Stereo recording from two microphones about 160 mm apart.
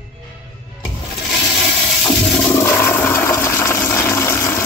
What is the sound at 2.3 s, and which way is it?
Toilet flush, 15° left (ahead or behind).